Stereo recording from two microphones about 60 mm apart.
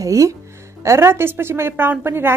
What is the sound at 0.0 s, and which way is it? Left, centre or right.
Speech, right.